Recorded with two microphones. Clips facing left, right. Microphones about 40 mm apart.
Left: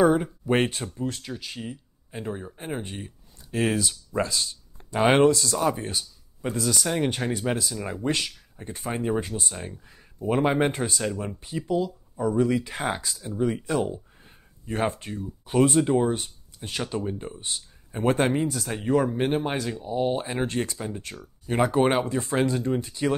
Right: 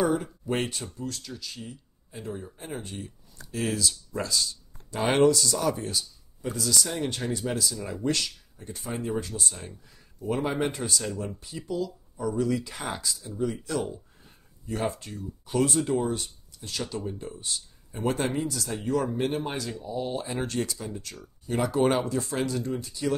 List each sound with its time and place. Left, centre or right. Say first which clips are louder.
0.0 s speech: left 6 dB; left
8.6 s speech: left 4 dB; left